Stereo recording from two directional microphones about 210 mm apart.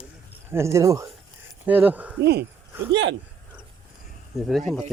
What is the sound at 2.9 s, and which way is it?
Speech, 65° right (ahead or behind).